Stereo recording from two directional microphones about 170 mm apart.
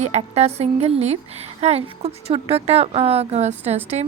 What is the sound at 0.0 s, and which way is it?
Speech, 40° right (ahead or behind).